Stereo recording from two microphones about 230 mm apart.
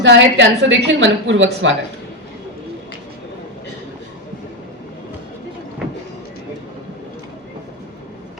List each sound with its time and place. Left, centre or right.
0.0 s a woman's voice: right